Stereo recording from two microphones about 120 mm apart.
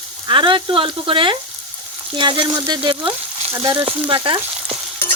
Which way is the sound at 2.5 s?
35° right (ahead or behind).